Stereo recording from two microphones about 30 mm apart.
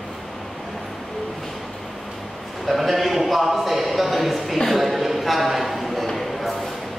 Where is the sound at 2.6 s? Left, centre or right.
Centre.